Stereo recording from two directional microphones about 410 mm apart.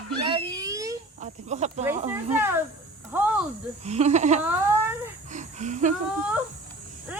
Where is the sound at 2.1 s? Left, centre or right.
Centre.